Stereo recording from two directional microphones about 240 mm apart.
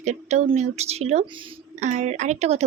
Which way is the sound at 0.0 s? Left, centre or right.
Right.